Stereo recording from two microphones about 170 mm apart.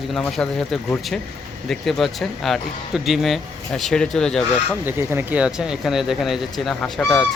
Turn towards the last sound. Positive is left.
turn(degrees=0)  # may be behind; listen again after turning